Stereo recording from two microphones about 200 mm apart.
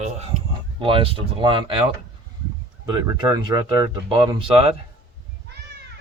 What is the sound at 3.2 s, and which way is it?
Speech, 20° right (ahead or behind).